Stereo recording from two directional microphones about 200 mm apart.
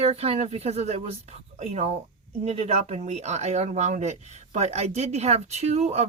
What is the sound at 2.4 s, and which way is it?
Speech, 30° right (ahead or behind).